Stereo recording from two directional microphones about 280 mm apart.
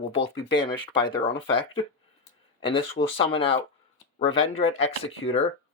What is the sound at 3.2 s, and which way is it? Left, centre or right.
Speech, centre.